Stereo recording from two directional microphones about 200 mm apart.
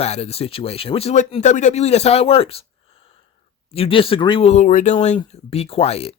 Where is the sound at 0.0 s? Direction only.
30° left (ahead or behind).